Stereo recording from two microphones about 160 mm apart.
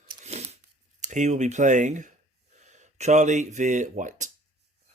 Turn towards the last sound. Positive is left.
turn(degrees=-50)  # may be behind; listen again after turning